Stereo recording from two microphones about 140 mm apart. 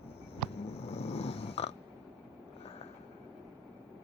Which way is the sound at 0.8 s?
50° left (ahead or behind).